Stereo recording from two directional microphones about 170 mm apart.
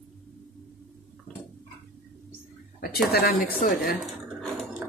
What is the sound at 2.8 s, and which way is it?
A woman's voice, 65° left (ahead or behind).